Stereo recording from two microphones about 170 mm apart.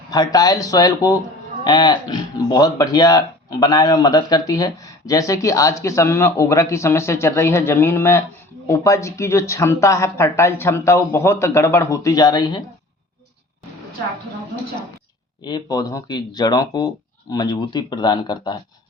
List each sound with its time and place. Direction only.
0.1 s speech: 20° left (ahead or behind)
15.4 s speech: 25° left (ahead or behind)